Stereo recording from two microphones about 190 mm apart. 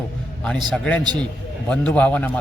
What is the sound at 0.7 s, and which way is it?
A man's voice, 5° left (ahead or behind).